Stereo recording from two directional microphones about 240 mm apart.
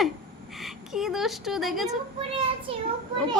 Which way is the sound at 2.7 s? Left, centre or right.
Right.